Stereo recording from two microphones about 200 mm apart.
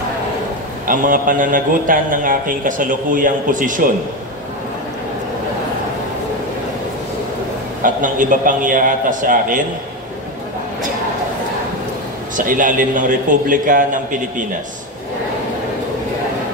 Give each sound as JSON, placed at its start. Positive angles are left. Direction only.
{"t": 0.8, "sound": "a man's voice", "side_deg": -45}
{"t": 7.8, "sound": "a man's voice", "side_deg": -40}
{"t": 12.4, "sound": "a man's voice", "side_deg": -40}